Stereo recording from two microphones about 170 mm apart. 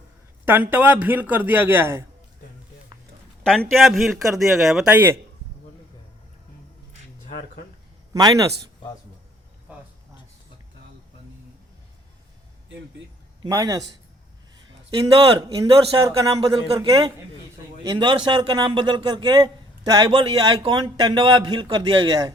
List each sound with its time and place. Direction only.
0.4 s a man's voice: 10° right (ahead or behind)
3.4 s speech: 5° left (ahead or behind)
8.1 s a man's voice: 20° right (ahead or behind)
13.4 s a man's voice: 20° right (ahead or behind)
16.0 s a man's voice: 20° right (ahead or behind)